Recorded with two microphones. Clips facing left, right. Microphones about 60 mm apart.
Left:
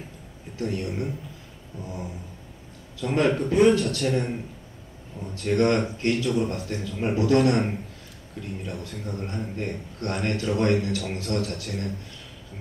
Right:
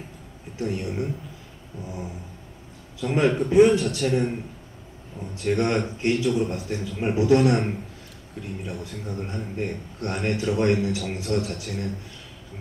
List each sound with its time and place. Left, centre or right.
0.6 s a man's voice: centre
3.0 s a man's voice: centre
5.3 s a man's voice: centre
8.6 s a man's voice: centre